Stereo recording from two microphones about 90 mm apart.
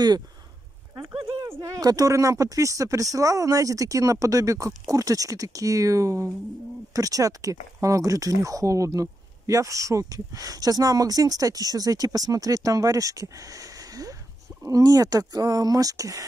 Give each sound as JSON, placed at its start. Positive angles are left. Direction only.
{"t": 1.2, "sound": "speech", "side_deg": -30}